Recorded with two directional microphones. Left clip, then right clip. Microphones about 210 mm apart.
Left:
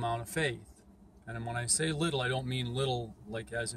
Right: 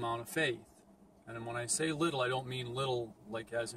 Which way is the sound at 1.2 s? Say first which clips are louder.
Left 2 dB; 20° left (ahead or behind).